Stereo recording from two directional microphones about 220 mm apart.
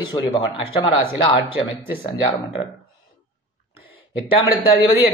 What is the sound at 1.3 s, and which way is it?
A man's voice, 25° left (ahead or behind).